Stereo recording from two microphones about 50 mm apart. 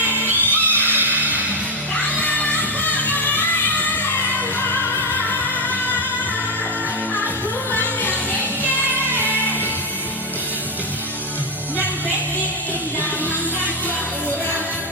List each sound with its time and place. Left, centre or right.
0.3 s music: right
2.2 s music: left
7.7 s music: left
9.1 s music: right